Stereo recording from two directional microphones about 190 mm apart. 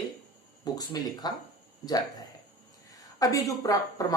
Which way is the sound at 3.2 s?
15° left (ahead or behind).